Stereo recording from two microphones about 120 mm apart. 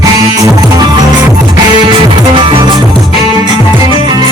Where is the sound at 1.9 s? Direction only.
45° right (ahead or behind).